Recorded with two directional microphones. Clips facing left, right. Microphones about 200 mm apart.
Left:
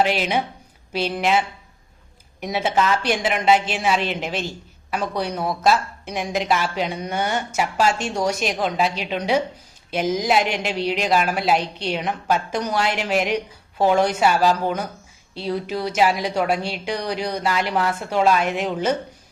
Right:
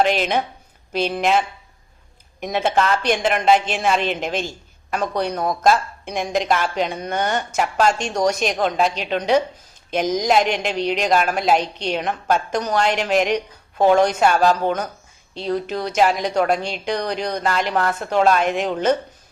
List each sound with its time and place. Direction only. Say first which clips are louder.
0.0 s speech: right 2 dB; 10° left (ahead or behind)
0.9 s speech: right 2 dB; 50° right (ahead or behind)
2.4 s a woman's voice: right 1 dB; 10° left (ahead or behind)
4.0 s a woman's voice: right 2 dB; 45° right (ahead or behind)
4.9 s a woman's voice: right 2 dB; 10° left (ahead or behind)